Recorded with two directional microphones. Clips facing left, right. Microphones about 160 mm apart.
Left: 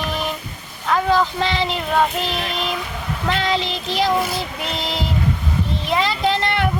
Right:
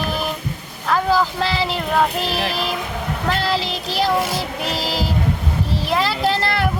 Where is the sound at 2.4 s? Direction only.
35° right (ahead or behind).